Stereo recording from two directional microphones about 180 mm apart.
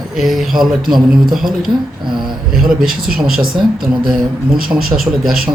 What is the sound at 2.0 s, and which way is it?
Speech, 25° right (ahead or behind).